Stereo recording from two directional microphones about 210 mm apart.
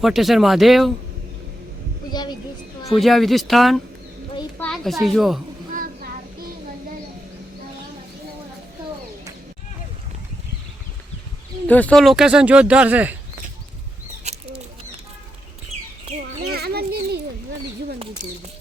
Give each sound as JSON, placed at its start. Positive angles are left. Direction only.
{"t": 0.0, "sound": "speech", "side_deg": 0}
{"t": 2.1, "sound": "a sound", "side_deg": 20}
{"t": 2.9, "sound": "speech", "side_deg": 0}
{"t": 5.7, "sound": "child singing", "side_deg": -45}
{"t": 11.7, "sound": "speech", "side_deg": 5}
{"t": 16.5, "sound": "children playing", "side_deg": -50}